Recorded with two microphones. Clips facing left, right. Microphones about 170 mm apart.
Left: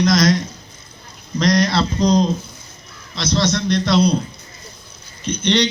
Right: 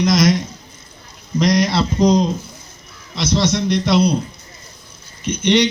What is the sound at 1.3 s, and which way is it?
Speech, 25° right (ahead or behind).